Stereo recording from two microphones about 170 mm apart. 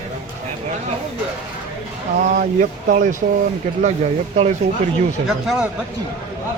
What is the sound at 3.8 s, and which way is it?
Speech, 45° right (ahead or behind).